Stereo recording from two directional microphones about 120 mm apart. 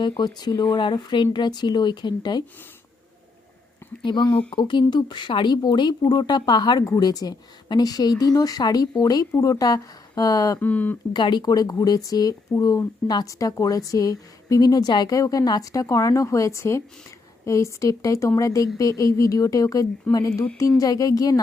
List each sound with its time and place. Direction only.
0.2 s a woman's voice: 35° left (ahead or behind)
4.0 s a woman's voice: 40° left (ahead or behind)
10.6 s speech: 15° left (ahead or behind)
11.1 s a woman's voice: 35° left (ahead or behind)